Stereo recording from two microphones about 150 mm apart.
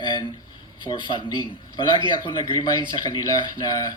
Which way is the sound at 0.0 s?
30° left (ahead or behind).